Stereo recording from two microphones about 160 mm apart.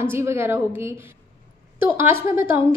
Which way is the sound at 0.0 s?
15° right (ahead or behind).